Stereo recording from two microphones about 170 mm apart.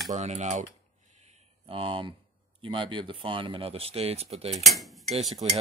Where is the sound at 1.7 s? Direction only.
30° right (ahead or behind).